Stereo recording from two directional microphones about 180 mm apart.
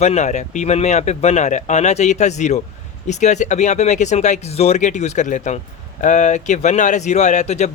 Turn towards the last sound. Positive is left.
turn(degrees=40)  # may be behind; listen again after turning